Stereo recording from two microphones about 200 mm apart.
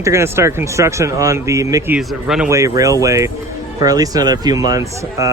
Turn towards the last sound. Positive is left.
turn(degrees=-15)  # may be behind; listen again after turning